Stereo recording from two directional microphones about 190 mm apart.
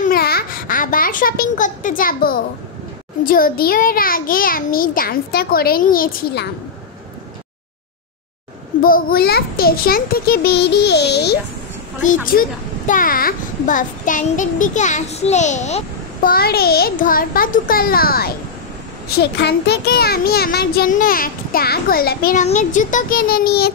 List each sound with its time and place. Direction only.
0.0 s a sound: 50° left (ahead or behind)
3.3 s a child's voice: 50° left (ahead or behind)
8.8 s a child's voice: 50° left (ahead or behind)
12.0 s a child's voice: 45° left (ahead or behind)
16.3 s a child's voice: 55° left (ahead or behind)